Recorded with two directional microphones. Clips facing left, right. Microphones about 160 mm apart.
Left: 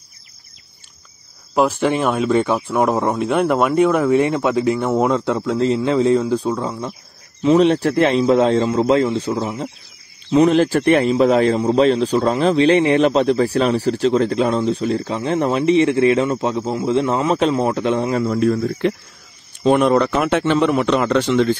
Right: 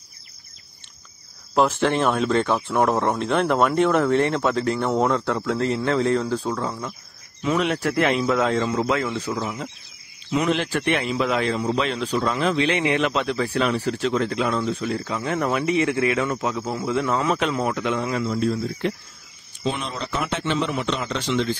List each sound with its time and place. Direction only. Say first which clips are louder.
1.5 s speech: left 3 dB; 5° left (ahead or behind)
7.4 s a man's voice: left 9 dB; 30° left (ahead or behind)
18.2 s speech: left 6 dB; 60° left (ahead or behind); by 18.9 s 75° left (ahead or behind)
19.6 s a man's voice: left 13 dB; 55° left (ahead or behind)